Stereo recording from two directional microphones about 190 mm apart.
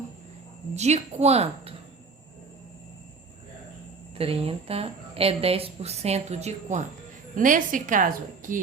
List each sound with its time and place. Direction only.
0.7 s a woman's voice: 35° right (ahead or behind)
4.2 s a woman's voice: 30° right (ahead or behind)